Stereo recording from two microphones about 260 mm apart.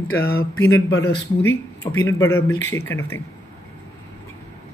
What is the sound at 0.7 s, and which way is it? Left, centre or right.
Speech, centre.